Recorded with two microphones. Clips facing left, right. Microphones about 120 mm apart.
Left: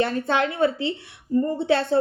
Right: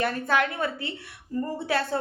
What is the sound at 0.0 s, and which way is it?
A woman's voice, 25° left (ahead or behind).